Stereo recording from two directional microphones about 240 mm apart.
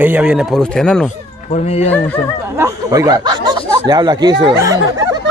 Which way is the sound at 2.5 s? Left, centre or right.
Centre.